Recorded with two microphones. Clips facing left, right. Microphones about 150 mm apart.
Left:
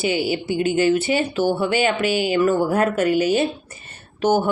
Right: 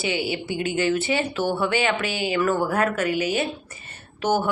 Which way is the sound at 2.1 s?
20° right (ahead or behind).